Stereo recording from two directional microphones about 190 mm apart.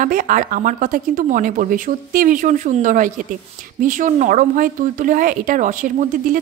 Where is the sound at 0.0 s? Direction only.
45° right (ahead or behind).